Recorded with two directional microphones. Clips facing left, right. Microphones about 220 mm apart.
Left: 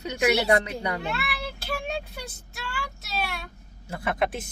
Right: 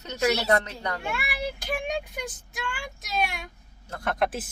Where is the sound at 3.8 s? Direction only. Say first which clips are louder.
Even; 5° left (ahead or behind).